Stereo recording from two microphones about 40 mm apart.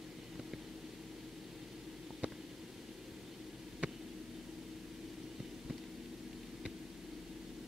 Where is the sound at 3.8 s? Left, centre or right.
Right.